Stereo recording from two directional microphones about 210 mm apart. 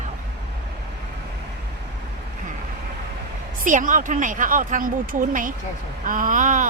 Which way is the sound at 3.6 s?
40° right (ahead or behind).